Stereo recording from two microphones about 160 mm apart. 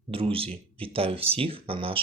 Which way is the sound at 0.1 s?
35° right (ahead or behind).